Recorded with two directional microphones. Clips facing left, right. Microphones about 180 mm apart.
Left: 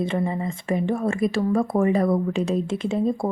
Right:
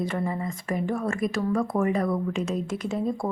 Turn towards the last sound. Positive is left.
turn(degrees=25)  # may be behind; listen again after turning